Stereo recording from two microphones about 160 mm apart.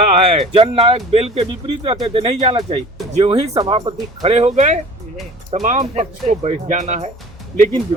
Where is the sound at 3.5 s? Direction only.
30° right (ahead or behind).